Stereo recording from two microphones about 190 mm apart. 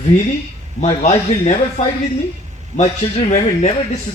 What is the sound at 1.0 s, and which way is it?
Speech, 35° left (ahead or behind).